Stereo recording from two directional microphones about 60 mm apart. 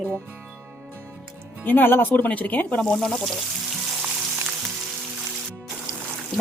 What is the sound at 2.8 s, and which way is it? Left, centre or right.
Speech, centre.